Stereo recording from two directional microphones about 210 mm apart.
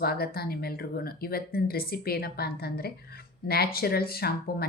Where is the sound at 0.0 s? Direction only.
45° left (ahead or behind).